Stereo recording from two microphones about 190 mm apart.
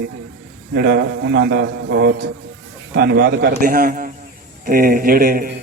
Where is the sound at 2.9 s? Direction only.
55° right (ahead or behind).